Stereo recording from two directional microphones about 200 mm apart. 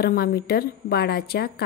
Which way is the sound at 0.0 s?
50° left (ahead or behind).